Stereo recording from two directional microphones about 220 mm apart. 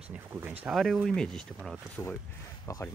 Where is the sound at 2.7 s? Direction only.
15° left (ahead or behind).